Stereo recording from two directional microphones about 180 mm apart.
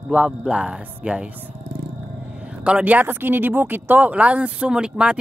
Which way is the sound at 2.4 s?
5° right (ahead or behind).